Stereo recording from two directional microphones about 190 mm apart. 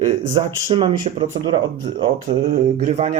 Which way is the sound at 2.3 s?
40° right (ahead or behind).